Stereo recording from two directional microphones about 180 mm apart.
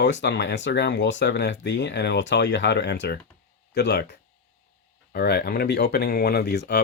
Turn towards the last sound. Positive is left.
turn(degrees=65)  # may be behind; listen again after turning